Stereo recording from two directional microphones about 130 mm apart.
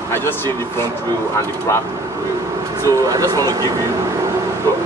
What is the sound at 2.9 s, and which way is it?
Speech, 25° right (ahead or behind).